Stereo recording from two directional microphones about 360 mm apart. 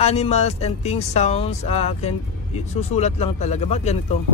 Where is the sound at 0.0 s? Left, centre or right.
Centre.